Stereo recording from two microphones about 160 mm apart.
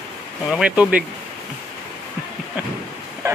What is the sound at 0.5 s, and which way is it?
Speech, 5° right (ahead or behind).